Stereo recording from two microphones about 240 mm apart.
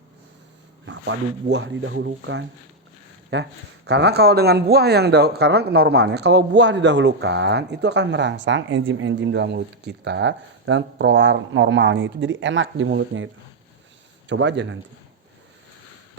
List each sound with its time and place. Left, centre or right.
0.9 s speech: right